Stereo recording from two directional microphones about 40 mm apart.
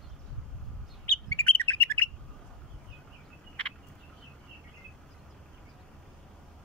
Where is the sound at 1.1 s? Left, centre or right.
Left.